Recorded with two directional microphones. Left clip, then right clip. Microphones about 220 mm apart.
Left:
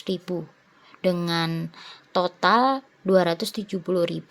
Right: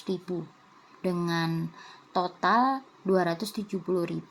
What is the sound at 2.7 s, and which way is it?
Speech, 35° left (ahead or behind).